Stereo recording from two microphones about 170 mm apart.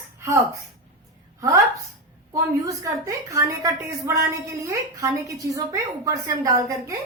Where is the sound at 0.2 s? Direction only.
20° right (ahead or behind).